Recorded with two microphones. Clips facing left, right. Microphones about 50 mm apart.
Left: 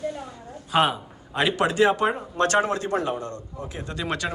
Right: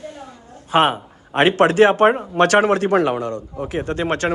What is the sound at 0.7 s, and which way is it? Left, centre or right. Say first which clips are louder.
A man's voice: right 5 dB; right.